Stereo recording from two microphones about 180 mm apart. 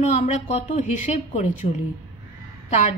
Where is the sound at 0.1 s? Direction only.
40° left (ahead or behind).